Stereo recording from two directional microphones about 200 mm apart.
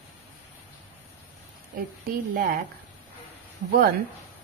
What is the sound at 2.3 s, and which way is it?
Speech, 45° right (ahead or behind).